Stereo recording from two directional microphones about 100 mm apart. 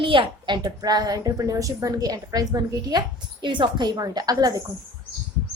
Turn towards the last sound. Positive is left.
turn(degrees=-40)  # may be behind; listen again after turning